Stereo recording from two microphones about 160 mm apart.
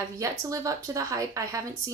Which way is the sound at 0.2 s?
20° right (ahead or behind).